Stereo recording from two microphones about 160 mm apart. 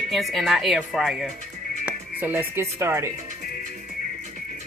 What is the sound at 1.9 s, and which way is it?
Speech, 10° right (ahead or behind).